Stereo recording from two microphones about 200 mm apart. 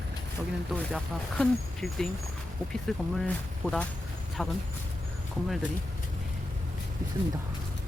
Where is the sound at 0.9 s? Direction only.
Centre (ahead or behind).